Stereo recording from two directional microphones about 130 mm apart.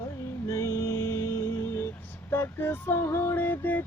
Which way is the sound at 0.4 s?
25° left (ahead or behind).